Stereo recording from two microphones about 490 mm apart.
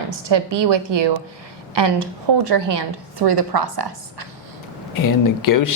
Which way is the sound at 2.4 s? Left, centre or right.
Right.